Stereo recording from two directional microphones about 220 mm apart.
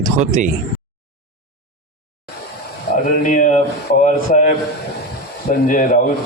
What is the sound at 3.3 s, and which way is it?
Speech, 35° left (ahead or behind).